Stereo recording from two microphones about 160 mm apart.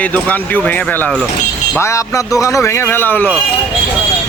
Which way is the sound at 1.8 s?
20° left (ahead or behind).